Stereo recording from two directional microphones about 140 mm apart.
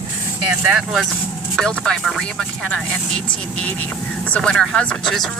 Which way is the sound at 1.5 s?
5° left (ahead or behind).